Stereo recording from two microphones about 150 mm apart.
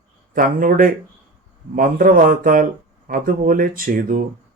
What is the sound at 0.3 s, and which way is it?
A man's voice, 70° right (ahead or behind).